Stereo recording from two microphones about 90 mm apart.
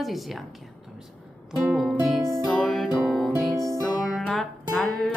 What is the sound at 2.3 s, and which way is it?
Music, 5° left (ahead or behind).